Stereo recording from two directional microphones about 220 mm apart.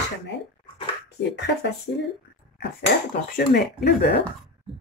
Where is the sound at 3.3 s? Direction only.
45° left (ahead or behind).